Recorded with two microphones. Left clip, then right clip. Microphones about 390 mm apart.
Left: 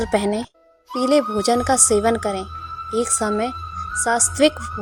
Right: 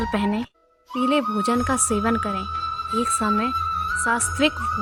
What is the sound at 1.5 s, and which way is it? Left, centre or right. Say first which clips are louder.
A woman's voice: left 5 dB; centre.